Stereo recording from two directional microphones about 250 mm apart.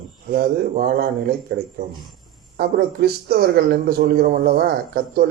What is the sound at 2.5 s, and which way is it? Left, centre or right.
Speech, right.